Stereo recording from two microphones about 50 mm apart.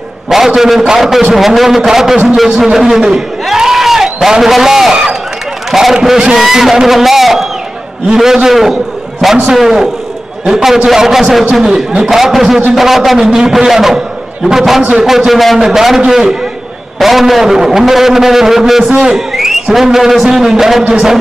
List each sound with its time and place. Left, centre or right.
0.3 s a man's voice: centre
3.0 s a sound: centre
6.3 s a man's voice: centre